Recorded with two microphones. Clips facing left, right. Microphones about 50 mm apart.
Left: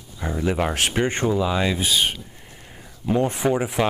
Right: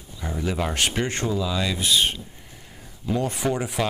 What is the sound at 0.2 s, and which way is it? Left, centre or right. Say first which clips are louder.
Speech: left 4 dB; left.